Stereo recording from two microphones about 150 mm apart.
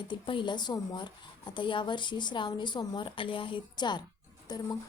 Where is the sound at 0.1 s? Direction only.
30° left (ahead or behind).